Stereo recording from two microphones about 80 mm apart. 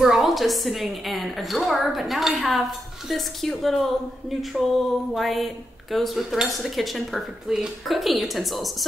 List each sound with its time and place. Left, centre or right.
0.0 s speech: centre